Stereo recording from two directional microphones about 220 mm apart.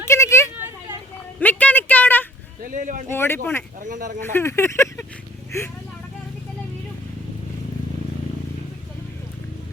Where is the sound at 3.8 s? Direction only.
35° right (ahead or behind).